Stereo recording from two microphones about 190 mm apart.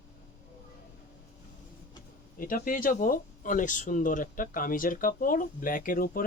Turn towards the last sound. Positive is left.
turn(degrees=50)  # may be behind; listen again after turning